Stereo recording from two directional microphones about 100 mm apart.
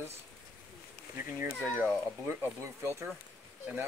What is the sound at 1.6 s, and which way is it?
Speech, 20° right (ahead or behind).